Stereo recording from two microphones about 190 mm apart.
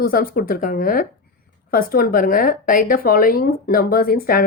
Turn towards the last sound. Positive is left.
turn(degrees=50)  # may be behind; listen again after turning